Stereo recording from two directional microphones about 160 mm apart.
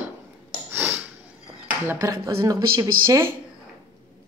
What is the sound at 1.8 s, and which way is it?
Speech, 20° right (ahead or behind).